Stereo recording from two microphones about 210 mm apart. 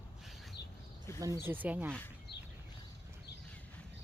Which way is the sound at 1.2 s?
15° right (ahead or behind).